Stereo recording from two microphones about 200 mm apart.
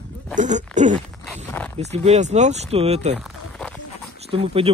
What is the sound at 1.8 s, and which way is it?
Speech, 35° right (ahead or behind).